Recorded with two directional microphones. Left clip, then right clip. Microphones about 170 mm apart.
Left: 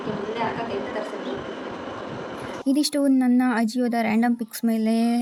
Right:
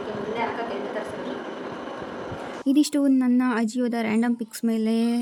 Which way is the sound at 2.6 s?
10° left (ahead or behind).